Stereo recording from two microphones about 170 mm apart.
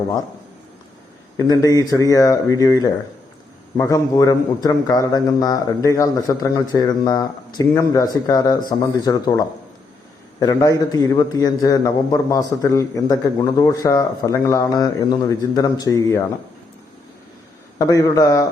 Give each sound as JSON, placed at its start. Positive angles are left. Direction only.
{"t": 1.4, "sound": "a man's voice", "side_deg": 20}
{"t": 10.4, "sound": "a man's voice", "side_deg": 20}
{"t": 17.7, "sound": "a man's voice", "side_deg": 20}